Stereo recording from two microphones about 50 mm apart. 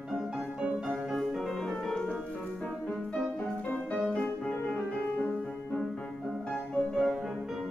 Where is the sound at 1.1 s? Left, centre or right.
Centre.